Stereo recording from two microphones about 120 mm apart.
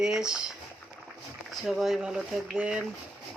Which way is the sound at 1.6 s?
Centre (ahead or behind).